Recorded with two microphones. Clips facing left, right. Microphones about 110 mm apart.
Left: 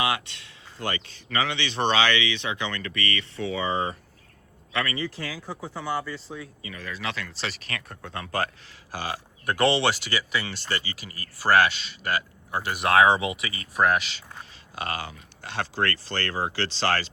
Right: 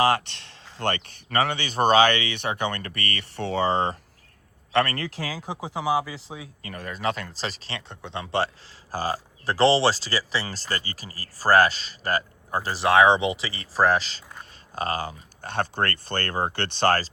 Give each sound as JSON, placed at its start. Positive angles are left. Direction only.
{"t": 0.8, "sound": "speech", "side_deg": -60}
{"t": 3.3, "sound": "speech", "side_deg": -65}
{"t": 5.1, "sound": "speech", "side_deg": -90}
{"t": 6.6, "sound": "speech", "side_deg": -50}
{"t": 8.9, "sound": "speech", "side_deg": -40}
{"t": 12.8, "sound": "speech", "side_deg": -25}